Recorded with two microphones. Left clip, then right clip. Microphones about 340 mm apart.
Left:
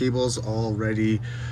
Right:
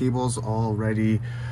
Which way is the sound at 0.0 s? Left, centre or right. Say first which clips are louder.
Left 2 dB; centre.